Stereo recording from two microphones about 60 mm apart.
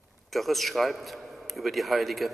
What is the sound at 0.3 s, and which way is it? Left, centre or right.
A man's voice, centre.